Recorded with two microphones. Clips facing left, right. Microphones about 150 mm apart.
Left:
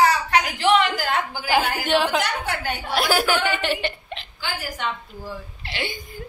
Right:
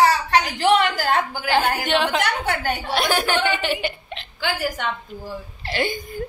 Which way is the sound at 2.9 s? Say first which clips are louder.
Left 1 dB; 5° left (ahead or behind).